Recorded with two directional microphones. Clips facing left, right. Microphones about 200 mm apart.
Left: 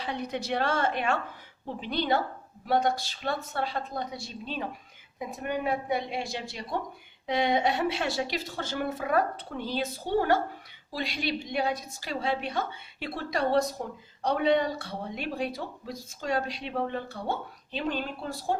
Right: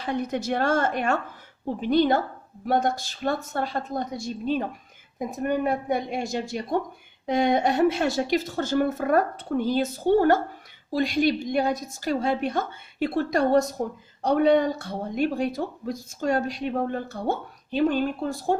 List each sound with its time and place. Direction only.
0.0 s speech: 50° right (ahead or behind)